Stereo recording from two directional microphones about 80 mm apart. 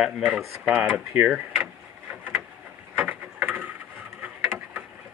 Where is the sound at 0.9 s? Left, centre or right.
Centre.